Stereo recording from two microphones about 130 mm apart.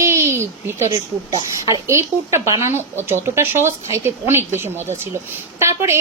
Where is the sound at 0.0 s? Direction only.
20° right (ahead or behind).